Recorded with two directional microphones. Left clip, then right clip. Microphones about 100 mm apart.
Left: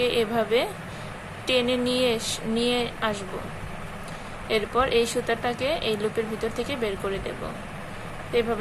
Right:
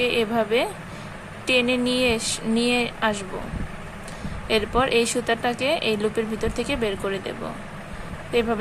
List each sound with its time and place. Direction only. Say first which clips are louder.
0.0 s a woman's voice: right 2 dB; 25° right (ahead or behind)
4.4 s a woman's voice: right 2 dB; 35° right (ahead or behind)